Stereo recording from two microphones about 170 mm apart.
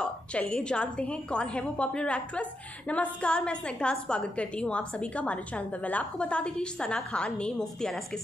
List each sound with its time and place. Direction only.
0.0 s a woman's voice: 5° left (ahead or behind)